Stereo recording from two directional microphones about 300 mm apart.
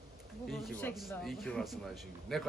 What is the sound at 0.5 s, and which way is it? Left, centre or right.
A man's voice, centre.